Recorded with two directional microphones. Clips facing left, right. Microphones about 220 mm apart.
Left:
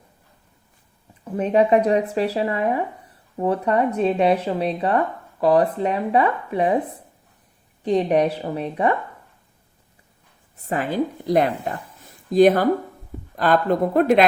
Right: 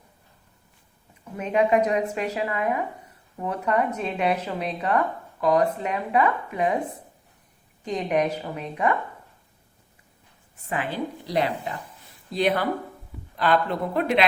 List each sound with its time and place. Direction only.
1.2 s speech: 35° left (ahead or behind)
7.9 s speech: 35° left (ahead or behind)
10.6 s a woman's voice: 40° left (ahead or behind)